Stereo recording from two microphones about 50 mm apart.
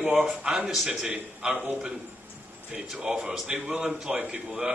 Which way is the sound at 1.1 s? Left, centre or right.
Right.